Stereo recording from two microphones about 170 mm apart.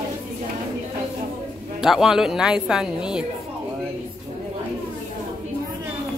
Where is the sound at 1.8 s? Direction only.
5° right (ahead or behind).